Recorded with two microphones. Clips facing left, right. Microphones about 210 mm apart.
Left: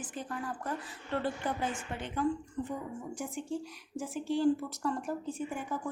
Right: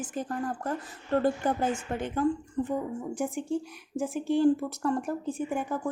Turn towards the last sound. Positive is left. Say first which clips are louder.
# right 6 dB
turn(degrees=-50)  # may be behind; listen again after turning